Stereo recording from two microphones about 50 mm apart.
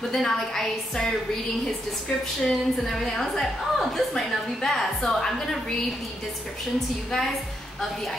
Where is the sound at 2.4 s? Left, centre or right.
Centre.